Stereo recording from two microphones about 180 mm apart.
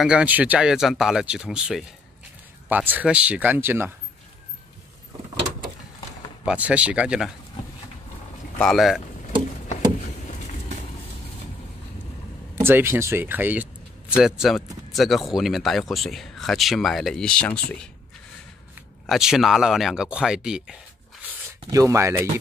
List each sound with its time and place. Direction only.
0.0 s speech: 5° right (ahead or behind)
6.4 s speech: 5° right (ahead or behind)
8.5 s speech: centre (ahead or behind)
12.5 s speech: 15° right (ahead or behind); by 17.7 s 5° left (ahead or behind)
19.0 s speech: centre (ahead or behind)
21.3 s speech: 15° right (ahead or behind)